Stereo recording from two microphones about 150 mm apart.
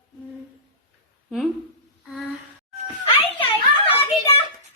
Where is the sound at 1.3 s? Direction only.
Centre (ahead or behind).